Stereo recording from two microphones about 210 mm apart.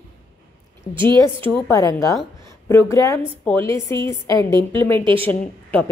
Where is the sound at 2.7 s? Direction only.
15° left (ahead or behind).